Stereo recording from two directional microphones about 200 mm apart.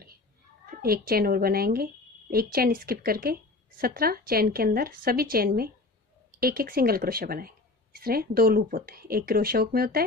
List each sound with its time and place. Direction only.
0.7 s speech: 50° right (ahead or behind)